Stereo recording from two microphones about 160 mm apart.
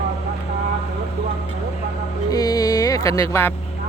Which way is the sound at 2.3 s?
20° left (ahead or behind).